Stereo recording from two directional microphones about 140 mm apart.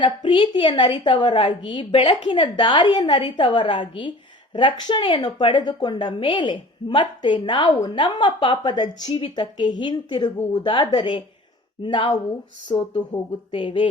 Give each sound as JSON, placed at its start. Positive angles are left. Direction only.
{"t": 0.0, "sound": "a woman's voice", "side_deg": 35}